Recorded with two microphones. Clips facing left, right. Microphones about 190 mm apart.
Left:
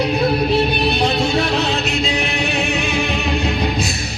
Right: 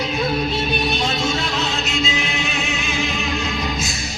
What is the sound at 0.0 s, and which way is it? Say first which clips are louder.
Music: left 5 dB; 65° left (ahead or behind).